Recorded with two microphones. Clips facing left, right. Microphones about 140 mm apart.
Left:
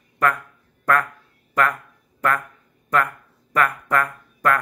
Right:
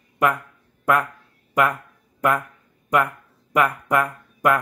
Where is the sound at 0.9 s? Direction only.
15° right (ahead or behind).